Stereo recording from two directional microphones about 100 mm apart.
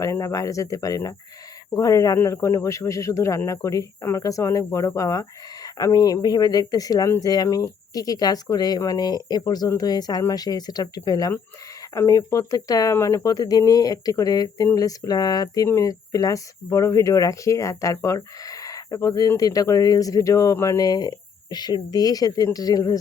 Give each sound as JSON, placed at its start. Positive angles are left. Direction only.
{"t": 0.0, "sound": "speech", "side_deg": 30}